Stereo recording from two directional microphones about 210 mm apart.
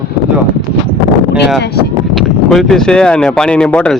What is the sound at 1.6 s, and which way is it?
Speech, 50° left (ahead or behind).